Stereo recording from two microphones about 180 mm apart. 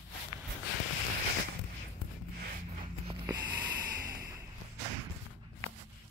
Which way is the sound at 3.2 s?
25° right (ahead or behind).